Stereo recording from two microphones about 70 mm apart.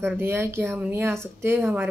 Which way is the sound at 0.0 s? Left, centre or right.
Right.